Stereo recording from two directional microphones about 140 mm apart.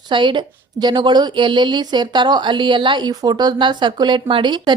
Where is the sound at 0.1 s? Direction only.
35° right (ahead or behind).